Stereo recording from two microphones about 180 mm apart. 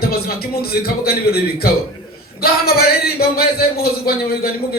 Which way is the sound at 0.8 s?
60° left (ahead or behind).